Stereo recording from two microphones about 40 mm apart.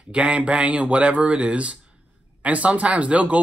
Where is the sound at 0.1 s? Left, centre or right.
Right.